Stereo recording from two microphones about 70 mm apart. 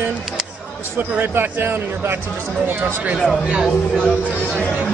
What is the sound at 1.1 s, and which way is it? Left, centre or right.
Speech, right.